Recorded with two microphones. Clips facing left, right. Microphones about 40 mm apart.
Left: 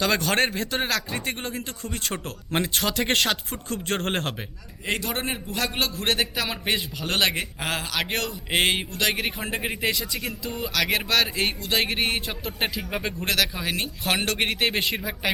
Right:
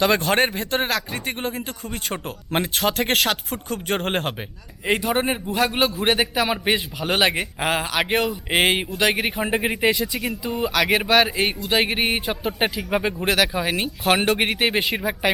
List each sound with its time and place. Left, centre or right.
0.0 s speech: right